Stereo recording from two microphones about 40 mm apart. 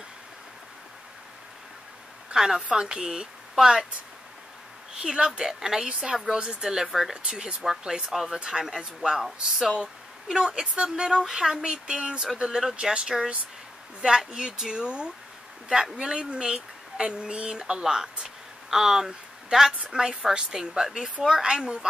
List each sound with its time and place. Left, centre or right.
2.3 s a woman's voice: centre
5.0 s a woman's voice: right
9.2 s speech: centre
10.4 s a woman's voice: centre